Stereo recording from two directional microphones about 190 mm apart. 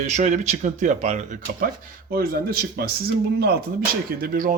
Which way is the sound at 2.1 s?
55° right (ahead or behind).